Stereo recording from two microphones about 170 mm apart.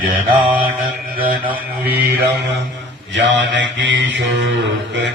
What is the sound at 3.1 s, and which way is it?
Mantra, 90° right.